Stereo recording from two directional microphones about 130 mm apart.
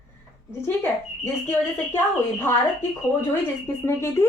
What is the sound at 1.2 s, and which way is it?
Speech, 15° left (ahead or behind).